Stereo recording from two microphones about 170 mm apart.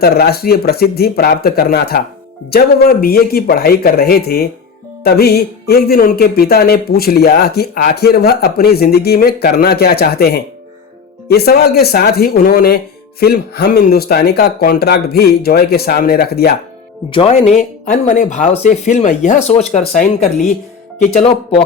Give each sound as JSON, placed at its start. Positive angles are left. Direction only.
{"t": 0.0, "sound": "music", "side_deg": 65}
{"t": 17.1, "sound": "speech", "side_deg": 35}